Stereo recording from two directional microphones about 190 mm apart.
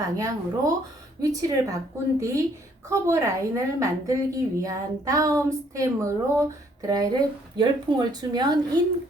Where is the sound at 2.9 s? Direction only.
15° right (ahead or behind).